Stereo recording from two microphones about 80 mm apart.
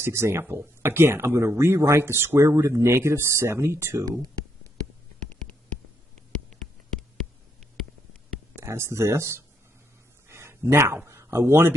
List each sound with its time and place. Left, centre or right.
0.0 s speech: right
8.5 s speech: right
10.2 s a sound: right
11.1 s speech: right